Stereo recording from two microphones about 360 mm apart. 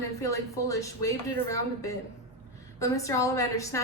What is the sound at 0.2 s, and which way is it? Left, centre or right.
A woman's voice, centre.